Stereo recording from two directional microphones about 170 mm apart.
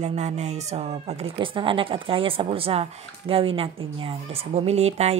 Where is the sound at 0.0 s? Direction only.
40° right (ahead or behind).